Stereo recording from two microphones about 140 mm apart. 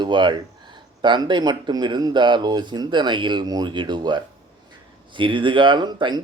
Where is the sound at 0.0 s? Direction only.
35° right (ahead or behind).